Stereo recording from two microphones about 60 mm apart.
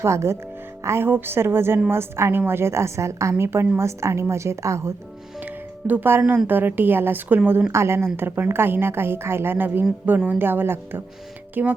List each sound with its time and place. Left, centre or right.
0.0 s a woman's voice: right
3.3 s a woman's voice: right
5.9 s a woman's voice: right
7.7 s a woman's voice: right